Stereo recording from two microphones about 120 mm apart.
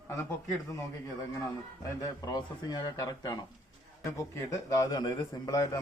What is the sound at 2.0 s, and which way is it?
A man's voice, 35° left (ahead or behind).